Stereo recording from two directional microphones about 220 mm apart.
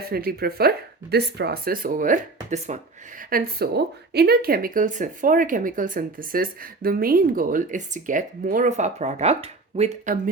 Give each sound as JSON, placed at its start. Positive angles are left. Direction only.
{"t": 0.1, "sound": "speech", "side_deg": -45}